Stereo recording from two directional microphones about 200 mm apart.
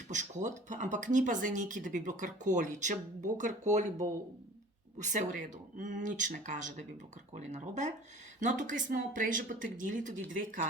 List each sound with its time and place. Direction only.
0.1 s speech: 35° right (ahead or behind)
4.9 s speech: 35° right (ahead or behind)